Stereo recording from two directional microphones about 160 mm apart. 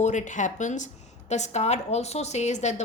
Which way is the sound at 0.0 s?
50° left (ahead or behind).